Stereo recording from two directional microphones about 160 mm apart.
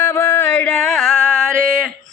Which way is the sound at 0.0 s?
10° left (ahead or behind).